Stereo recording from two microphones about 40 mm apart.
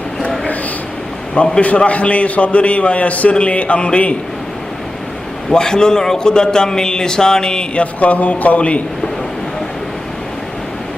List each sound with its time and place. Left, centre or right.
1.6 s a man's voice: left
5.5 s a man's voice: centre
7.9 s a man's voice: left